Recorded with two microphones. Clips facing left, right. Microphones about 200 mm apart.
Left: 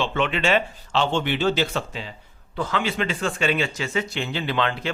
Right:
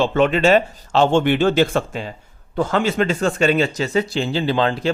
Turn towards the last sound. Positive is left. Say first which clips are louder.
# right 6 dB
turn(degrees=-35)  # may be behind; listen again after turning